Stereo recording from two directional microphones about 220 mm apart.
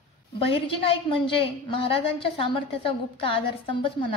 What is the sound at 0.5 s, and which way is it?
A woman's voice, 25° left (ahead or behind).